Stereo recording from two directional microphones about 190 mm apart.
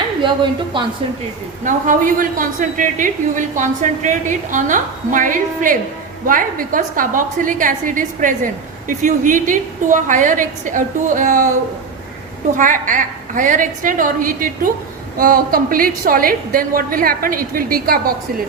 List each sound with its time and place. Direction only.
0.2 s a woman's voice: 25° right (ahead or behind)
1.6 s a woman's voice: 45° right (ahead or behind)
12.5 s a woman's voice: 45° right (ahead or behind)